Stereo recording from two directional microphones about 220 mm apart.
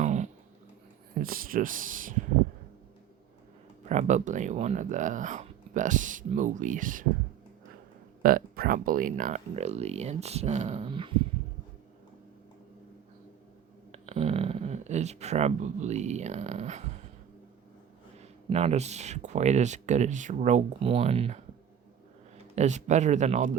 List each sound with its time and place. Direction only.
0.0 s a sound: 30° right (ahead or behind)
1.2 s speech: 40° right (ahead or behind)
3.8 s speech: 35° right (ahead or behind)
8.2 s speech: 40° right (ahead or behind); by 11.2 s 20° right (ahead or behind)
13.9 s speech: 30° right (ahead or behind)
18.2 s speech: 30° right (ahead or behind)
22.5 s speech: 30° right (ahead or behind)